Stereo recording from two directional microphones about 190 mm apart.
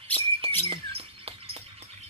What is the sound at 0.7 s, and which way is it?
Chirp, 30° right (ahead or behind).